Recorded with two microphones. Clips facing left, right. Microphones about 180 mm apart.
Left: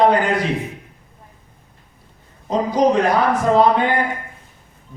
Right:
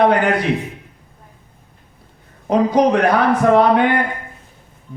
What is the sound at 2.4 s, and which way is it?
A man's voice, 65° right (ahead or behind).